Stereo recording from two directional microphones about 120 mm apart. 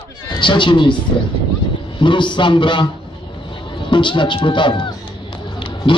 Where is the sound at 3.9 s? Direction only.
40° left (ahead or behind).